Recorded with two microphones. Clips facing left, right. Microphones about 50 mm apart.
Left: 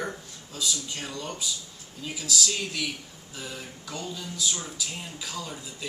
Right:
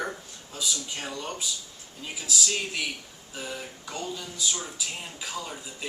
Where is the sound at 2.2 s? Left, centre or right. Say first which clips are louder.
Even; right.